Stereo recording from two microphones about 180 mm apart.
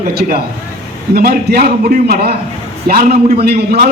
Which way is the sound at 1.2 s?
60° right (ahead or behind).